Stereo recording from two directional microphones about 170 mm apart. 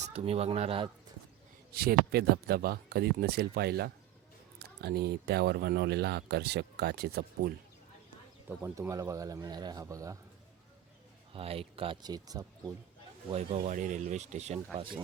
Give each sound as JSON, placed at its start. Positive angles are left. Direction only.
{"t": 0.0, "sound": "speech", "side_deg": -40}
{"t": 1.7, "sound": "speech", "side_deg": -65}
{"t": 8.4, "sound": "speech", "side_deg": -15}
{"t": 11.3, "sound": "speech", "side_deg": -35}
{"t": 13.3, "sound": "speech", "side_deg": -45}